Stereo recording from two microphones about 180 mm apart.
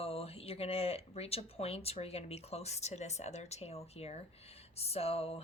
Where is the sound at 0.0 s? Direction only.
35° left (ahead or behind).